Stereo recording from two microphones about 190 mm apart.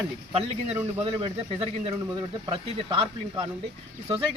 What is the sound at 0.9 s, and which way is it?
Speech, 30° right (ahead or behind).